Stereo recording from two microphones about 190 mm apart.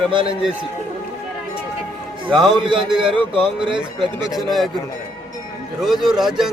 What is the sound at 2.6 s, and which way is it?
Speech, 25° right (ahead or behind).